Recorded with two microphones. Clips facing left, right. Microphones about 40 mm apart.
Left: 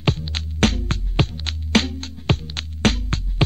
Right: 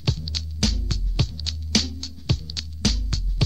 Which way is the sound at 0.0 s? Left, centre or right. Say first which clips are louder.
Left 6 dB; left.